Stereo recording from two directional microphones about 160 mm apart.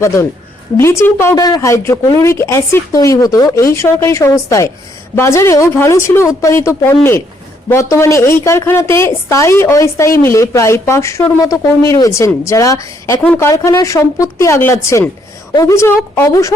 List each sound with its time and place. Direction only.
0.8 s a woman's voice: 15° left (ahead or behind)